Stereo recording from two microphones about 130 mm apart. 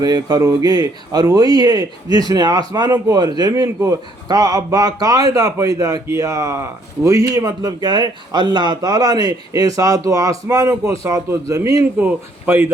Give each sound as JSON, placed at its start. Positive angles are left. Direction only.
{"t": 0.0, "sound": "a man's voice", "side_deg": -30}